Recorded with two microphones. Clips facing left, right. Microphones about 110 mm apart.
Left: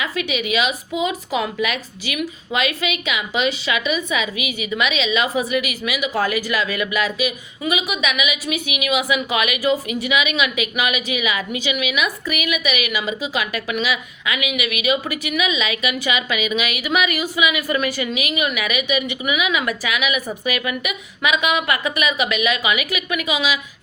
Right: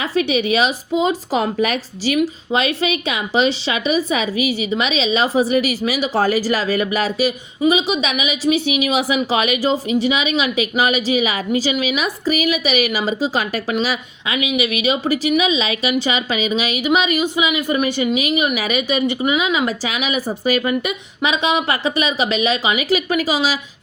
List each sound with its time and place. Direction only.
0.0 s a woman's voice: 35° right (ahead or behind)